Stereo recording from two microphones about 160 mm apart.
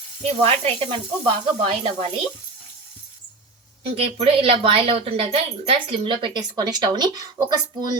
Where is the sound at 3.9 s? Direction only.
35° right (ahead or behind).